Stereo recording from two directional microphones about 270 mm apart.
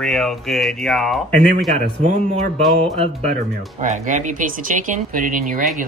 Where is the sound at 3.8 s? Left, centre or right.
Right.